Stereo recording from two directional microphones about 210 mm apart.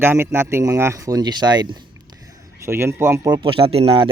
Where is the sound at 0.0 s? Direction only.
10° right (ahead or behind).